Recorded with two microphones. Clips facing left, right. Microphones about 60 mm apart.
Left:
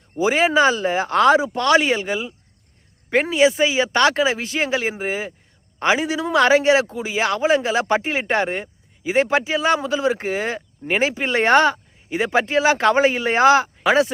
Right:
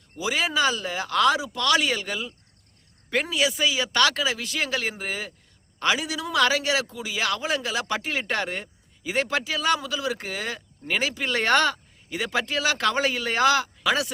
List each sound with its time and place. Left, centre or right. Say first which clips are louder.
0.2 s a man's voice: left 8 dB; left